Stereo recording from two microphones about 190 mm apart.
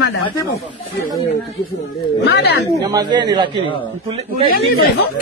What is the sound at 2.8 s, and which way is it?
Speech, 20° right (ahead or behind).